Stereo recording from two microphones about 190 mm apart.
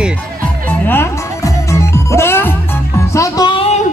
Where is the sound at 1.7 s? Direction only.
15° left (ahead or behind).